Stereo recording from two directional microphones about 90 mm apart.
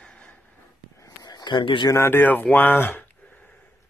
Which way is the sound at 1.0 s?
45° left (ahead or behind).